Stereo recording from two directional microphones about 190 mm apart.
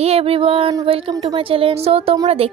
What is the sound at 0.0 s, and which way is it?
A woman's voice, 30° right (ahead or behind).